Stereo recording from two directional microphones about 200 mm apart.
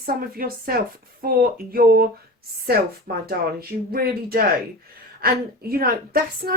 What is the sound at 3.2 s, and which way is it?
Speech, 50° right (ahead or behind).